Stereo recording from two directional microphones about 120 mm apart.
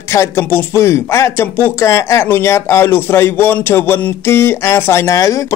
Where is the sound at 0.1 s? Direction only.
20° left (ahead or behind).